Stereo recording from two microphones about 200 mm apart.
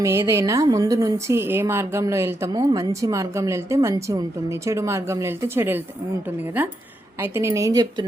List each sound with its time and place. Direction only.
0.0 s a woman's voice: 15° right (ahead or behind)